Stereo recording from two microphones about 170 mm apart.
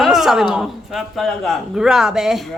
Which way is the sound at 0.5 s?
Centre (ahead or behind).